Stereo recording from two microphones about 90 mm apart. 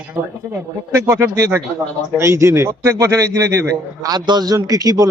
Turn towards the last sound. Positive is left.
turn(degrees=-45)  # may be behind; listen again after turning